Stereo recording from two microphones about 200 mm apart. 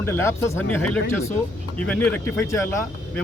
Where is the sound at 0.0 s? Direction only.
15° left (ahead or behind).